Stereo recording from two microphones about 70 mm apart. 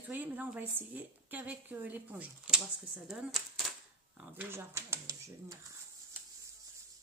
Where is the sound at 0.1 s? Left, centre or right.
Right.